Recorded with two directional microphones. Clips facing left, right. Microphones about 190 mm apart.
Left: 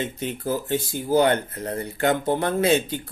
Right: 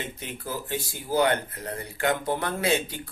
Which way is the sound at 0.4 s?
25° left (ahead or behind).